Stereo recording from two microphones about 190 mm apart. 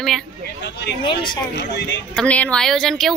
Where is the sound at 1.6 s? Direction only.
65° left (ahead or behind).